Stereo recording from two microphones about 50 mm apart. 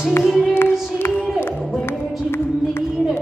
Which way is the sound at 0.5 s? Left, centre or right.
Left.